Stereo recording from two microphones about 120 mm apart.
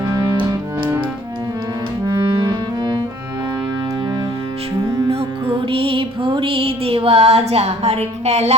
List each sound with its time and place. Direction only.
0.0 s music: 35° right (ahead or behind)
2.0 s clarinet: 35° right (ahead or behind)
5.0 s music: 50° right (ahead or behind); by 8.5 s 65° right (ahead or behind)